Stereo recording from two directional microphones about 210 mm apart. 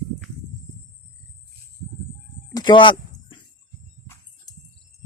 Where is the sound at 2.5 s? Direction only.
20° left (ahead or behind).